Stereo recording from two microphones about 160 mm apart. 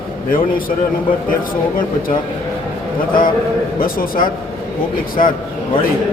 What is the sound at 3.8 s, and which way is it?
Speech, 60° left (ahead or behind).